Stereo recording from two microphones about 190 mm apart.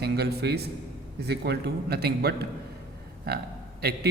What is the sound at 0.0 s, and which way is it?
A man's voice, 60° right (ahead or behind).